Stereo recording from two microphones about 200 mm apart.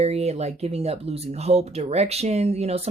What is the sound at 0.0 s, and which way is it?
Speech, 30° right (ahead or behind).